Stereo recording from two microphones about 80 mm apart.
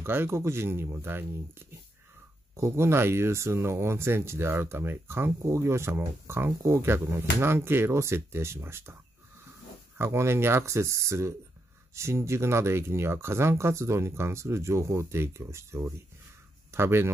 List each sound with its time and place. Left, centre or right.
0.0 s speech: right
2.5 s speech: right
9.9 s speech: right